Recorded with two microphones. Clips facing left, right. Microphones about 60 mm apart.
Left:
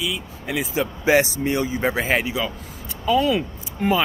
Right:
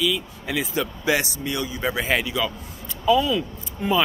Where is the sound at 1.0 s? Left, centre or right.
Left.